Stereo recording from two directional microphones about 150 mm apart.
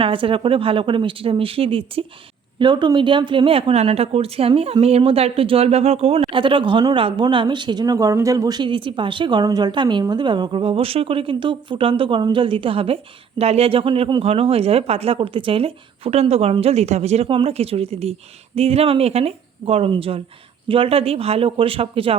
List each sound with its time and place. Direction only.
0.0 s speech: 35° right (ahead or behind)